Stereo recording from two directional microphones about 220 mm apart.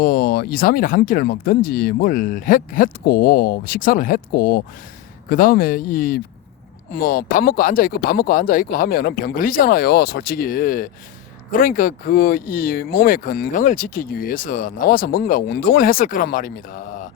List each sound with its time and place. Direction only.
0.0 s speech: 40° left (ahead or behind)